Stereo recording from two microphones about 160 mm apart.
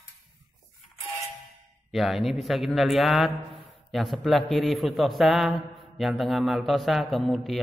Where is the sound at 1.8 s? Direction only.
Centre (ahead or behind).